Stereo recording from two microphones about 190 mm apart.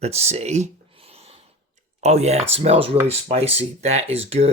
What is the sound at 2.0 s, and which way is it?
Speech, 35° right (ahead or behind).